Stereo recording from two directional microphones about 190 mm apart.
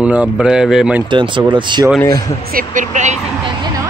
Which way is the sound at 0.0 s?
5° right (ahead or behind).